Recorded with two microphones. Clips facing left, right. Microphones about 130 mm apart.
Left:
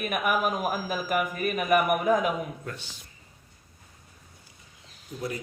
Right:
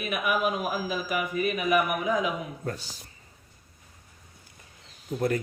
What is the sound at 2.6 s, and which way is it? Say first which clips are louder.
Speech: right 5 dB; 40° right (ahead or behind).